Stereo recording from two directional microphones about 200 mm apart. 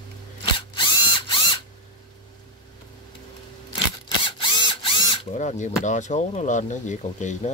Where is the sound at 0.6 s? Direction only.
25° left (ahead or behind).